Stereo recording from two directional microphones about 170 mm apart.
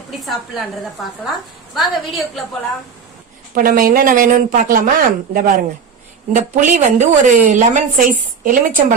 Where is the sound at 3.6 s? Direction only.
55° right (ahead or behind).